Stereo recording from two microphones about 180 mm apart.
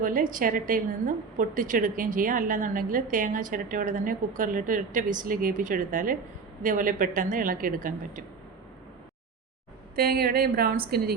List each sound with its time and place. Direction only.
0.0 s a woman's voice: 50° right (ahead or behind)
9.9 s a woman's voice: 55° right (ahead or behind)